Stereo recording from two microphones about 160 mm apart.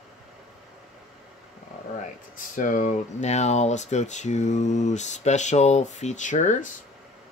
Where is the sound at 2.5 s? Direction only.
50° left (ahead or behind).